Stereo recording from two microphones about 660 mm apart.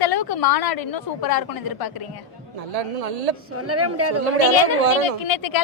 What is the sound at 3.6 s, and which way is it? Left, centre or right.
Speech, right.